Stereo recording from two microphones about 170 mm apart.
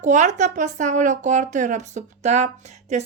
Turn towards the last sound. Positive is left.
turn(degrees=-45)  # may be behind; listen again after turning